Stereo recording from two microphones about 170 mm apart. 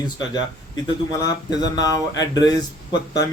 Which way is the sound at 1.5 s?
20° left (ahead or behind).